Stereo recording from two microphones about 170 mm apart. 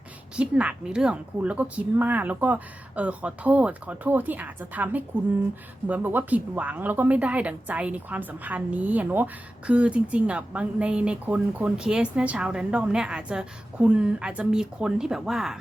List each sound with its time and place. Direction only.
0.3 s a woman's voice: 5° right (ahead or behind)